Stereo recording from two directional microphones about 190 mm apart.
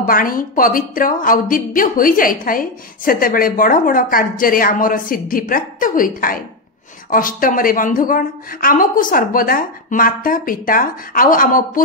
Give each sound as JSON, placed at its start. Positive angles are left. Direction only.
{"t": 0.0, "sound": "a woman's voice", "side_deg": 45}